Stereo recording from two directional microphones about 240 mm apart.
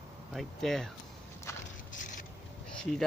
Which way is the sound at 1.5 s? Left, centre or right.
Centre.